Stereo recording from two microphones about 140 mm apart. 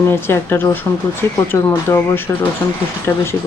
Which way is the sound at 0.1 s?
15° left (ahead or behind).